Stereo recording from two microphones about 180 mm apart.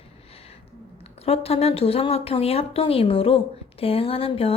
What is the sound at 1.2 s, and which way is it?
Speech, 35° left (ahead or behind).